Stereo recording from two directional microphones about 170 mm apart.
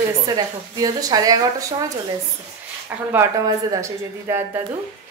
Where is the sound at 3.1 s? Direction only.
20° right (ahead or behind).